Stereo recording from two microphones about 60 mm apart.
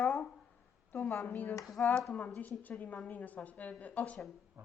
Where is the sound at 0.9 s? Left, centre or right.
Left.